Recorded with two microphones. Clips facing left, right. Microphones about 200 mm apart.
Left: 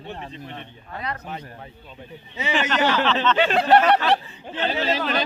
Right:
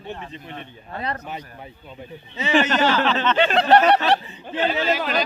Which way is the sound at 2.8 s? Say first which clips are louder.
Right 1 dB; 15° left (ahead or behind).